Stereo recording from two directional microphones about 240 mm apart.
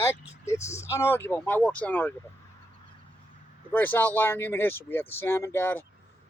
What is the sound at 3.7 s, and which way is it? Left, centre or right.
Speech, centre.